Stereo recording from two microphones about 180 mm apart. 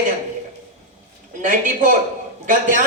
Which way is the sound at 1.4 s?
45° right (ahead or behind).